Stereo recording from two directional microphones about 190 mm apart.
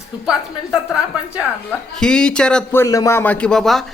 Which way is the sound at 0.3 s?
5° right (ahead or behind).